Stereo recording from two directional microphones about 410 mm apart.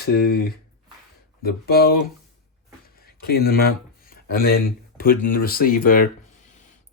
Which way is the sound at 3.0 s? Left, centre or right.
Left.